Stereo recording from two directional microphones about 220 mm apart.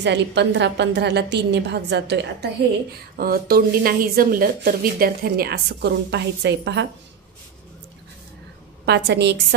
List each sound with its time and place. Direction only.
0.0 s speech: 50° right (ahead or behind)
8.8 s speech: 50° right (ahead or behind)